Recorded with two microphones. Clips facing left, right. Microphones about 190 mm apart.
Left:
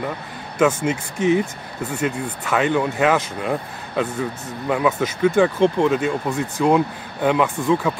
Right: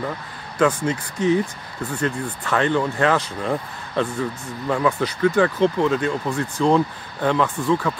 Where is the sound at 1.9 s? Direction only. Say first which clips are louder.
Left 1 dB; 5° left (ahead or behind).